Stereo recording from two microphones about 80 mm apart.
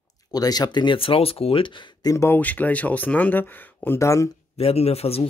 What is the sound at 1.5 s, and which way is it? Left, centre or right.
Speech, left.